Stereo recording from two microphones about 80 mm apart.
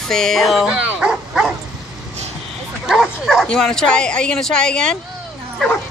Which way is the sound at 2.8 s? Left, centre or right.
Centre.